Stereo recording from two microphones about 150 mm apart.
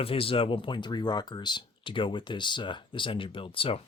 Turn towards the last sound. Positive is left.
turn(degrees=35)  # may be behind; listen again after turning